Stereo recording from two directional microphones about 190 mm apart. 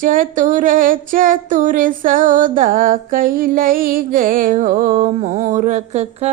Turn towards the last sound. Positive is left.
turn(degrees=-35)  # may be behind; listen again after turning